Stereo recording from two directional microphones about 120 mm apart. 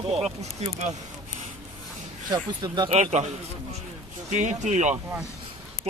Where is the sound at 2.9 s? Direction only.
85° right.